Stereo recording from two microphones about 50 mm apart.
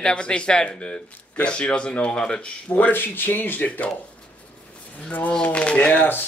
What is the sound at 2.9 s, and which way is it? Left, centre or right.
Speech, left.